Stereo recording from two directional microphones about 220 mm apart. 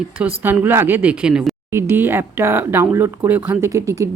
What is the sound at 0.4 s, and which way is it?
A woman's voice, 10° right (ahead or behind).